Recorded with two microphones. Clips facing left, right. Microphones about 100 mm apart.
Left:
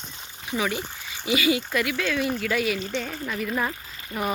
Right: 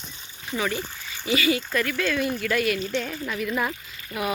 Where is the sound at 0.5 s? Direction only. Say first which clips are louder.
Even; 15° left (ahead or behind).